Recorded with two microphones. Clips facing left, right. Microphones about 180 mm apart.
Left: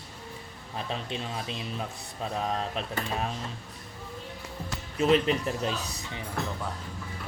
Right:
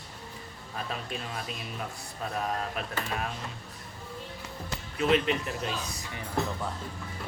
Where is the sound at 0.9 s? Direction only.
25° left (ahead or behind).